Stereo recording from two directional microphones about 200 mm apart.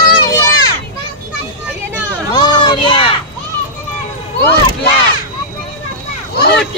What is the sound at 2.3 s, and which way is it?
Children playing, 20° left (ahead or behind).